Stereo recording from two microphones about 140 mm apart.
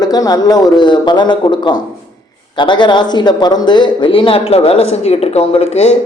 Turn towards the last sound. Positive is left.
turn(degrees=50)  # may be behind; listen again after turning